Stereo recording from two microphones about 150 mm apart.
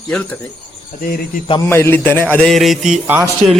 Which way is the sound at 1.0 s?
70° left (ahead or behind).